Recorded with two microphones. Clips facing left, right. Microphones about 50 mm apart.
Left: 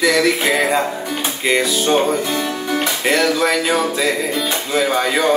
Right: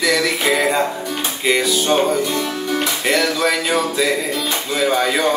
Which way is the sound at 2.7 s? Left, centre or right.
Centre.